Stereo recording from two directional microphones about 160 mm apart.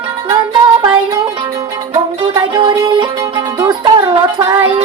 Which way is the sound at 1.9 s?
35° right (ahead or behind).